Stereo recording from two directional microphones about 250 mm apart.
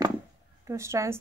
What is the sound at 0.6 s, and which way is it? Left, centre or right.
Speech, centre.